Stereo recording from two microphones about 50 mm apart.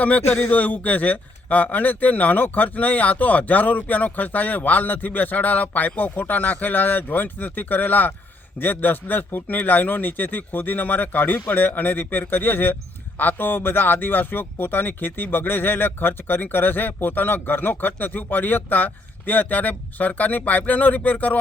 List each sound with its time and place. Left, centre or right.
0.4 s speech: left